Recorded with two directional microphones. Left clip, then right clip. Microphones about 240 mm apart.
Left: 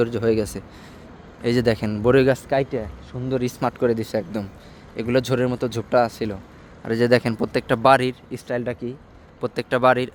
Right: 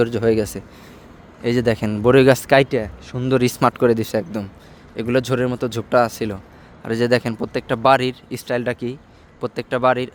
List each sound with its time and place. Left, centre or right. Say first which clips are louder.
0.0 s speech: right 3 dB; centre
2.5 s speech: right 7 dB; right; by 9.0 s centre
9.4 s speech: even; centre